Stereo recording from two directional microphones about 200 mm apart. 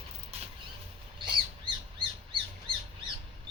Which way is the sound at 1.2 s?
25° right (ahead or behind).